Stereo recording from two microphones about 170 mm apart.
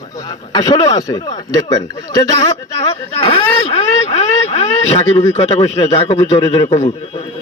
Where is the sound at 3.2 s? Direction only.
30° left (ahead or behind).